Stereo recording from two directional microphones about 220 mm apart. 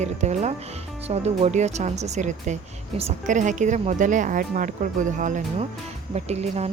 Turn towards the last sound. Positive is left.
turn(degrees=-30)  # may be behind; listen again after turning